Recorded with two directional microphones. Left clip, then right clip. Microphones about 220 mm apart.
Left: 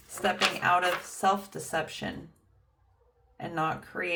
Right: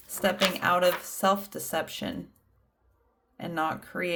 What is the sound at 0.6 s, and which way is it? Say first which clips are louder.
Speech: right 3 dB; 50° right (ahead or behind).